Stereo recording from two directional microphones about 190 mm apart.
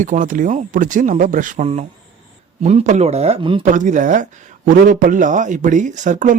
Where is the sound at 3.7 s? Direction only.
40° right (ahead or behind).